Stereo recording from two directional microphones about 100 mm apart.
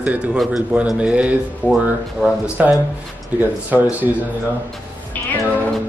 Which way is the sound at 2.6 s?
15° right (ahead or behind).